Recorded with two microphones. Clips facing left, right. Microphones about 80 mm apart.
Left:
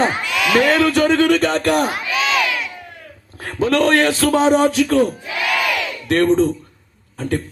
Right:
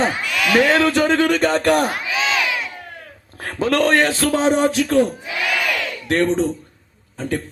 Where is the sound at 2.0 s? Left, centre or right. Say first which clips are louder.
Left 2 dB; right.